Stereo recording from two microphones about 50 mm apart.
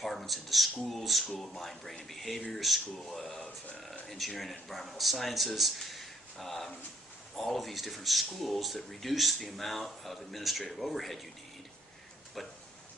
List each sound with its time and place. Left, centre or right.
0.0 s speech: centre
12.4 s speech: centre